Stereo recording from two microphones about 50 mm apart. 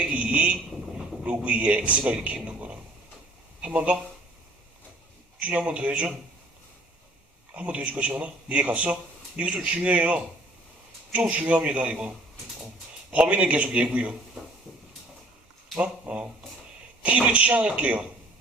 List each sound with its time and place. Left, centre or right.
0.0 s a sound: right
1.5 s speech: right
2.2 s a sound: right
3.6 s speech: right
5.4 s speech: right
7.5 s speech: right
15.8 s speech: right